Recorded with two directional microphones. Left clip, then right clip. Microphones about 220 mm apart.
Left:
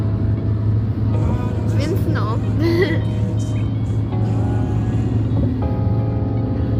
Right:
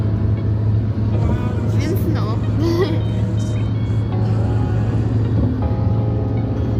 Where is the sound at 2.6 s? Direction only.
15° left (ahead or behind).